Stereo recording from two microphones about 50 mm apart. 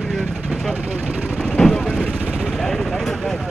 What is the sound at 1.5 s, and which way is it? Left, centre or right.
Vehicle, centre.